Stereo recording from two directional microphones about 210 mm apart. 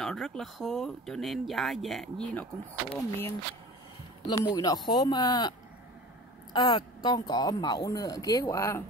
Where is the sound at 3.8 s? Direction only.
20° left (ahead or behind).